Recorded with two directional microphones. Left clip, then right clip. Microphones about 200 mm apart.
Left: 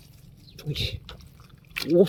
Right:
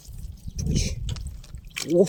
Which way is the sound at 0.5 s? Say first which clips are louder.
Even; 5° left (ahead or behind).